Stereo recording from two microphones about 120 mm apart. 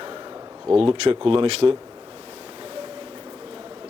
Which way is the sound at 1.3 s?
50° right (ahead or behind).